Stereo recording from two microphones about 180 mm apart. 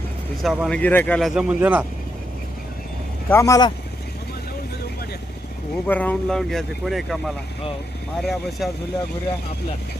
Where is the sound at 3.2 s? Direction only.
15° left (ahead or behind).